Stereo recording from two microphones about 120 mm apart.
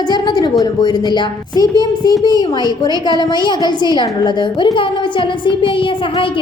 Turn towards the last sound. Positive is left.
turn(degrees=45)  # may be behind; listen again after turning